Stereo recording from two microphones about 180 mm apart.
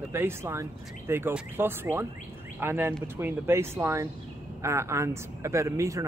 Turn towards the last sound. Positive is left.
turn(degrees=-15)  # may be behind; listen again after turning